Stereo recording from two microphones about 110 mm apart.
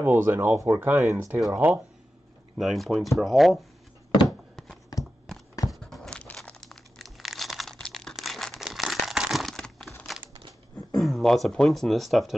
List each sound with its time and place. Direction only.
0.0 s speech: 20° right (ahead or behind)
2.6 s speech: centre (ahead or behind)
4.9 s a sound: 35° left (ahead or behind)
5.7 s crumpling: centre (ahead or behind)
11.0 s speech: centre (ahead or behind)